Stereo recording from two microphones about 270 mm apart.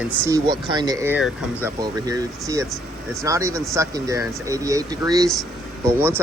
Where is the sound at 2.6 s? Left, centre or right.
Centre.